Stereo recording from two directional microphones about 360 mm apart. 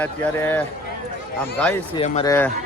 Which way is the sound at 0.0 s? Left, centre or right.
Centre.